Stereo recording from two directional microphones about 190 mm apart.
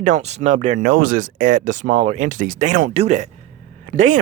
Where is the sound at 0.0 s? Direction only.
35° right (ahead or behind).